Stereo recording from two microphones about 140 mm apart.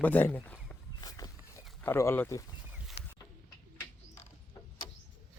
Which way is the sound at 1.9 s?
15° left (ahead or behind).